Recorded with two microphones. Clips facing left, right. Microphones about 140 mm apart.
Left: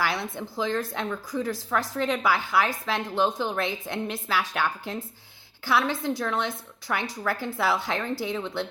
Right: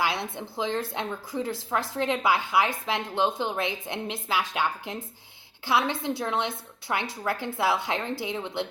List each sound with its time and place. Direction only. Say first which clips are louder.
0.0 s a woman's voice: even; 20° right (ahead or behind)